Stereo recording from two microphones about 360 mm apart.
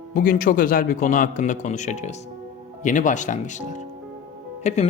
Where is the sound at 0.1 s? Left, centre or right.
Left.